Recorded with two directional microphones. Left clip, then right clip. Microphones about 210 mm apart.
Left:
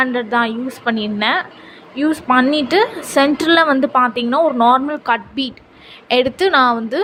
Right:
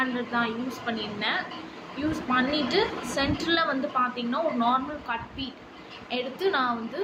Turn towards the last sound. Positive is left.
turn(degrees=50)  # may be behind; listen again after turning